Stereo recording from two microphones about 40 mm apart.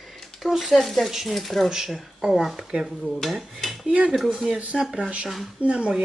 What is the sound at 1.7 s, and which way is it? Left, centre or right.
Speech, centre.